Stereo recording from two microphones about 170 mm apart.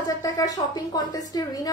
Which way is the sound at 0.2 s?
20° left (ahead or behind).